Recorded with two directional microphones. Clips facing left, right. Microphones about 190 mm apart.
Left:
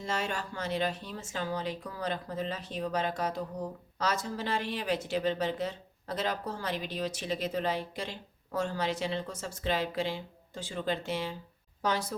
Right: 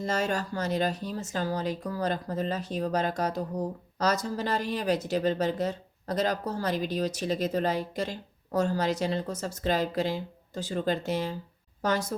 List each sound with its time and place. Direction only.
0.0 s a woman's voice: 40° right (ahead or behind)